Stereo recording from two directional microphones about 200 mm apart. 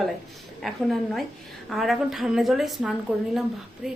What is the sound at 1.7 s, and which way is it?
A woman's voice, centre (ahead or behind).